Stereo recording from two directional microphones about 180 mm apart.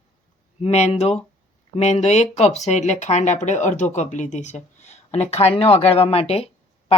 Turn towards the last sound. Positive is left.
turn(degrees=35)  # may be behind; listen again after turning